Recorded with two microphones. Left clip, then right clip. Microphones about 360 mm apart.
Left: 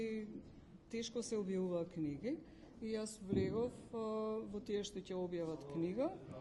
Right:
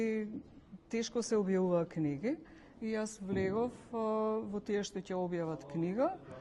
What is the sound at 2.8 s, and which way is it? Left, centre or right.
A man's voice, right.